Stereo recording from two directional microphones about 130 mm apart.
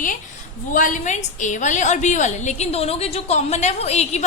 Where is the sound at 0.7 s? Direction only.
90° left.